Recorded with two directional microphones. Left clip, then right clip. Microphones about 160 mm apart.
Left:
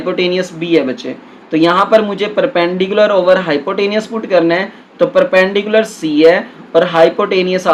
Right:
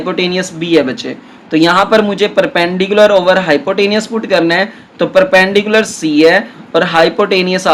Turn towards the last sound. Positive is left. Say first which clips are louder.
# right 2 dB
turn(degrees=-45)  # may be behind; listen again after turning